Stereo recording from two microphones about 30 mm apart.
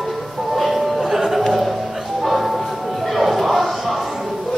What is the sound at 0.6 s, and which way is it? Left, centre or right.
Music, centre.